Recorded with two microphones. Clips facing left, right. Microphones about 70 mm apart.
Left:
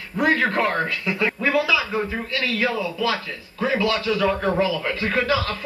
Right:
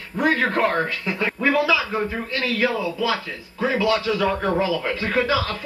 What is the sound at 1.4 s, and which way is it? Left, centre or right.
Speech, centre.